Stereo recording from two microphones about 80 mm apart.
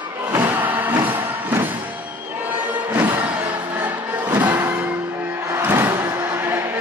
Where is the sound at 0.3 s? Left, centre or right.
Right.